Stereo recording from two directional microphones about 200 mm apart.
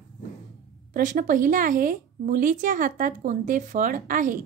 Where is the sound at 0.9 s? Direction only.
40° right (ahead or behind).